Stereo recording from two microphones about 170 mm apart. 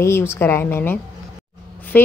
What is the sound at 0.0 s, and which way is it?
A woman's voice, 15° left (ahead or behind).